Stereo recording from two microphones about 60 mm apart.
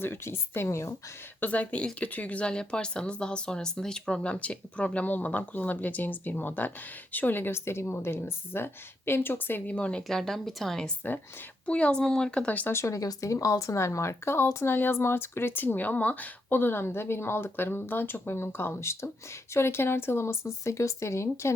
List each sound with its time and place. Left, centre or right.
0.0 s a woman's voice: left
1.4 s speech: left
10.1 s speech: centre
11.6 s speech: centre
12.5 s speech: left
12.7 s speech: left
13.0 s a woman's voice: left